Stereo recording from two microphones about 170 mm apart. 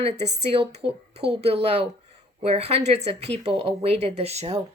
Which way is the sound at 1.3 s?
35° right (ahead or behind).